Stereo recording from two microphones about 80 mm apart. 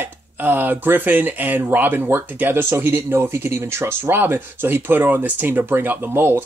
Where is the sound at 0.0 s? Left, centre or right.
Right.